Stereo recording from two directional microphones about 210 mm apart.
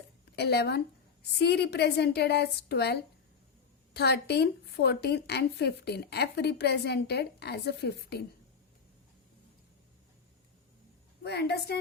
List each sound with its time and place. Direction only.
0.3 s a woman's voice: 50° left (ahead or behind)
11.2 s a woman's voice: 50° left (ahead or behind)